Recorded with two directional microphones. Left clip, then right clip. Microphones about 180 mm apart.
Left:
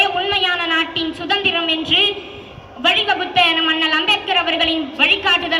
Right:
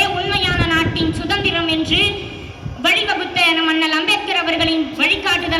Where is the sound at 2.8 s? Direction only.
35° right (ahead or behind).